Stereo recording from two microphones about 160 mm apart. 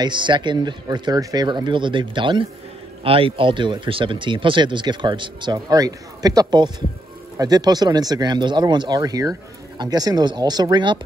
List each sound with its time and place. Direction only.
0.0 s speech: 30° right (ahead or behind)